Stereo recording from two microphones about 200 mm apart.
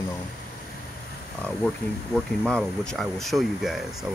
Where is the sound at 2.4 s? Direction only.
5° left (ahead or behind).